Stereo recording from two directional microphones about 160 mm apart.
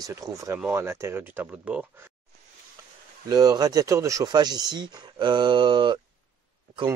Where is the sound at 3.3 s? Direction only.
25° right (ahead or behind).